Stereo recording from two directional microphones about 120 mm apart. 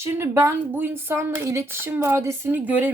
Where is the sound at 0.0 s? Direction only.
20° right (ahead or behind).